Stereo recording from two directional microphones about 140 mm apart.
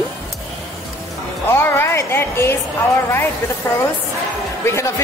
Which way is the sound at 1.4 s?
15° left (ahead or behind).